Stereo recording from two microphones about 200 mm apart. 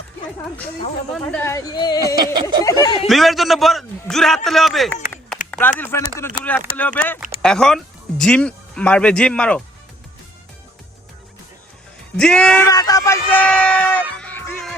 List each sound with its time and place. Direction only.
1.2 s speech: 10° left (ahead or behind)
2.1 s a sound: 20° right (ahead or behind)
2.6 s speech: 20° left (ahead or behind)
3.1 s speech: centre (ahead or behind)
5.5 s a sound: 10° left (ahead or behind)
6.0 s speech: 15° left (ahead or behind)
12.1 s speech: 5° left (ahead or behind)
12.7 s speech: 15° left (ahead or behind)